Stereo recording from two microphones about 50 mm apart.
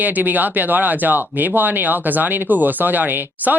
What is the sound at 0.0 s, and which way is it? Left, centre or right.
Speech, right.